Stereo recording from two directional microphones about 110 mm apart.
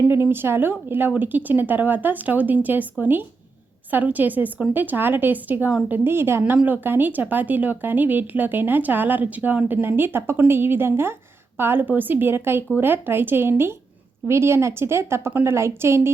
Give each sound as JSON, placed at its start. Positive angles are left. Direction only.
{"t": 0.0, "sound": "a woman's voice", "side_deg": -20}